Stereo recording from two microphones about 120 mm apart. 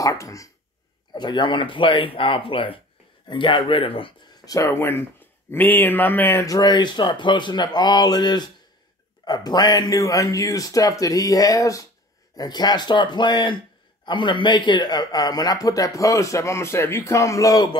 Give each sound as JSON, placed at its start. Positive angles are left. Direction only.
{"t": 0.0, "sound": "speech", "side_deg": 25}
{"t": 1.1, "sound": "speech", "side_deg": 40}
{"t": 4.5, "sound": "speech", "side_deg": 25}